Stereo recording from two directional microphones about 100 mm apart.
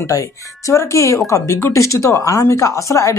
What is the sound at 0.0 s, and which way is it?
Speech, 30° left (ahead or behind).